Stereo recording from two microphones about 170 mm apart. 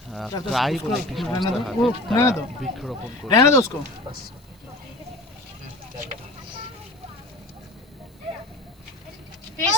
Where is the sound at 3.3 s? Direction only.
20° left (ahead or behind).